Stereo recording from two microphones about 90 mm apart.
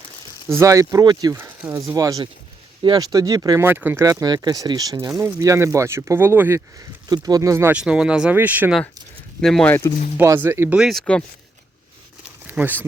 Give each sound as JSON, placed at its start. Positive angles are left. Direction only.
{"t": 0.4, "sound": "speech", "side_deg": -30}
{"t": 1.3, "sound": "speech", "side_deg": -25}
{"t": 2.0, "sound": "speech", "side_deg": -40}
{"t": 3.6, "sound": "speech", "side_deg": -25}
{"t": 4.0, "sound": "speech", "side_deg": -40}
{"t": 4.9, "sound": "speech", "side_deg": -30}
{"t": 6.7, "sound": "speech", "side_deg": -50}
{"t": 7.7, "sound": "speech", "side_deg": -10}
{"t": 8.4, "sound": "speech", "side_deg": -20}
{"t": 9.4, "sound": "speech", "side_deg": 5}
{"t": 9.8, "sound": "speech", "side_deg": 35}
{"t": 10.2, "sound": "speech", "side_deg": -25}
{"t": 10.8, "sound": "speech", "side_deg": 0}
{"t": 12.5, "sound": "speech", "side_deg": -20}